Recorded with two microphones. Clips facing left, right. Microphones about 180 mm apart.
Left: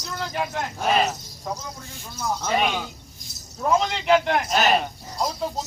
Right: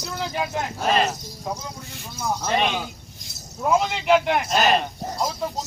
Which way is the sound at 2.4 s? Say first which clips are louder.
Even; 5° left (ahead or behind).